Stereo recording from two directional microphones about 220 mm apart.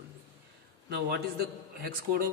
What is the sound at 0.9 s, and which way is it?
A man's voice, 45° right (ahead or behind).